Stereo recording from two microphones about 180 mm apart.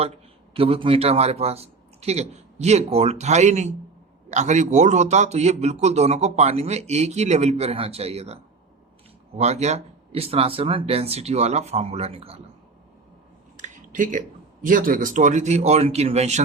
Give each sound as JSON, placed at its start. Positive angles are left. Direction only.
{"t": 0.5, "sound": "a man's voice", "side_deg": -30}
{"t": 9.4, "sound": "a man's voice", "side_deg": -40}
{"t": 13.6, "sound": "speech", "side_deg": -45}